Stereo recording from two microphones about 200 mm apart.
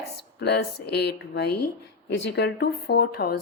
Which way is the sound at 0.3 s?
55° left (ahead or behind).